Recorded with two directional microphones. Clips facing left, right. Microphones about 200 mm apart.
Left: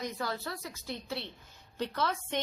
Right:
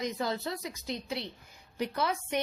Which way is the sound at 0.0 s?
20° right (ahead or behind).